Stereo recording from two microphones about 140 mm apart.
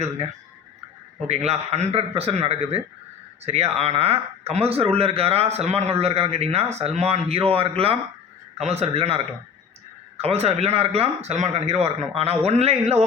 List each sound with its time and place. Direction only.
1.3 s speech: 50° right (ahead or behind)